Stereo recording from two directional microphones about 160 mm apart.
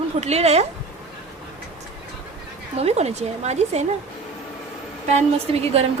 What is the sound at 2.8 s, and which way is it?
A woman's voice, 40° right (ahead or behind).